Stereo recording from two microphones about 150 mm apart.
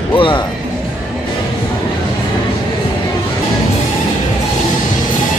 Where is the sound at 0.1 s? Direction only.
35° left (ahead or behind).